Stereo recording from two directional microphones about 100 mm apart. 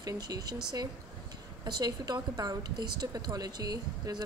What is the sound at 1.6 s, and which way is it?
A woman's voice, 45° right (ahead or behind).